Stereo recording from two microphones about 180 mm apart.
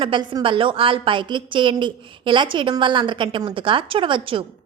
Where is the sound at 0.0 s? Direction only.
25° right (ahead or behind).